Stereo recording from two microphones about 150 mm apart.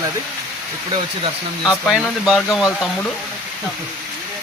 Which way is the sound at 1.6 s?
Centre (ahead or behind).